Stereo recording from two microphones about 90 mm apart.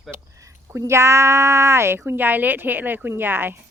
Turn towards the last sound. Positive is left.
turn(degrees=-25)  # may be behind; listen again after turning